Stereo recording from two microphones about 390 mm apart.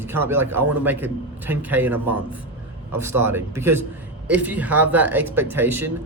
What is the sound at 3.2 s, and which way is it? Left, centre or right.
Speech, centre.